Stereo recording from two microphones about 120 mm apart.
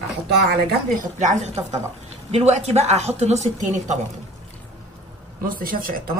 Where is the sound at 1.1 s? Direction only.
85° right.